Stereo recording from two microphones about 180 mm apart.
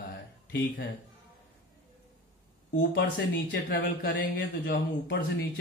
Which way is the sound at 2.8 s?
60° left (ahead or behind).